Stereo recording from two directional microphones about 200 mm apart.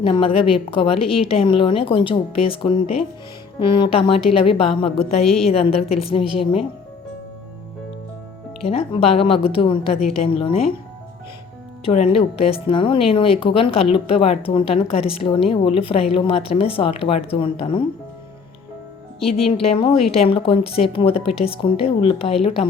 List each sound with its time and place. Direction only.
0.0 s speech: 25° left (ahead or behind)
5.2 s a woman's voice: centre (ahead or behind)
5.5 s speech: 30° left (ahead or behind)
8.6 s speech: 30° left (ahead or behind)
11.9 s speech: 30° left (ahead or behind)
19.2 s speech: 30° left (ahead or behind)